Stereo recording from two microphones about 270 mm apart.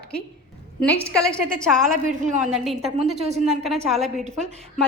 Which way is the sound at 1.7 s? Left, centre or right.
Right.